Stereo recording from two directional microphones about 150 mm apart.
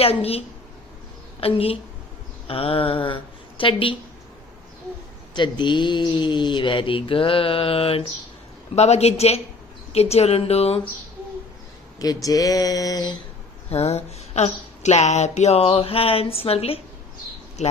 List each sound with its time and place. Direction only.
0.0 s speech: 40° left (ahead or behind)
1.4 s speech: 40° left (ahead or behind)
5.3 s speech: 30° left (ahead or behind)
12.0 s speech: 25° left (ahead or behind)
13.7 s speech: 45° left (ahead or behind)